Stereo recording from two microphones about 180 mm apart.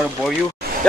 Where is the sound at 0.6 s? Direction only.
60° right (ahead or behind).